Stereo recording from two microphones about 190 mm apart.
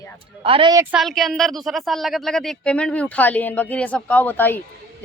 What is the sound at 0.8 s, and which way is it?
Speech, 5° right (ahead or behind).